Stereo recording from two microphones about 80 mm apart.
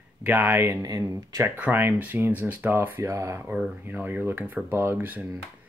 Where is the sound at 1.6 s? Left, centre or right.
Right.